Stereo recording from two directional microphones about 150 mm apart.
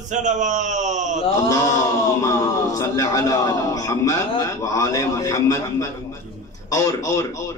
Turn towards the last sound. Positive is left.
turn(degrees=25)  # may be behind; listen again after turning